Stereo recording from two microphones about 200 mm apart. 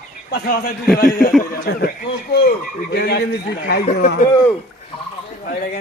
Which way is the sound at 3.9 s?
40° left (ahead or behind).